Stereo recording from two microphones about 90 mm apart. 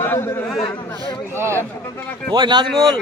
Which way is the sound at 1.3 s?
30° right (ahead or behind).